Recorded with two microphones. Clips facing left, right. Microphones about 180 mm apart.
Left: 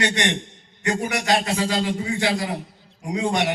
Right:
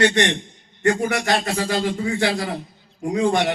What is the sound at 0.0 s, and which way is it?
A man's voice, 50° right (ahead or behind).